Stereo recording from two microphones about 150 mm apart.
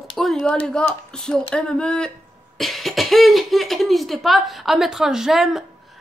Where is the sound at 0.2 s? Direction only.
Centre (ahead or behind).